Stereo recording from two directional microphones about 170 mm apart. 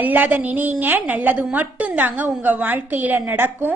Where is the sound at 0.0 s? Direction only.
10° right (ahead or behind).